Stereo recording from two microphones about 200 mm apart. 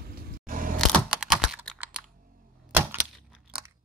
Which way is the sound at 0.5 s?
45° right (ahead or behind).